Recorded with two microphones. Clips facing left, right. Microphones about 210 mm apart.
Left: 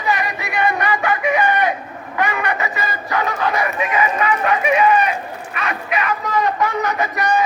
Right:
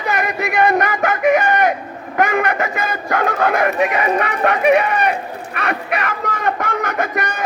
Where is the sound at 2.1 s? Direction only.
45° right (ahead or behind); by 5.1 s 65° right (ahead or behind).